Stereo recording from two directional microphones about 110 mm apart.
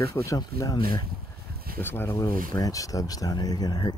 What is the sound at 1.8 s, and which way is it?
Speech, 20° left (ahead or behind).